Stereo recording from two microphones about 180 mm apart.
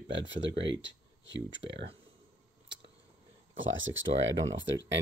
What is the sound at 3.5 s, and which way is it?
Speech, 90° right.